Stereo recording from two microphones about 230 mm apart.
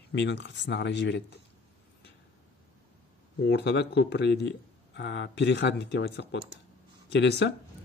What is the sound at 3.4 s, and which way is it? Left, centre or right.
Speech, left.